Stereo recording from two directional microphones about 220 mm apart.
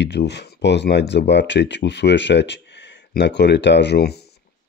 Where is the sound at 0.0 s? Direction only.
50° left (ahead or behind).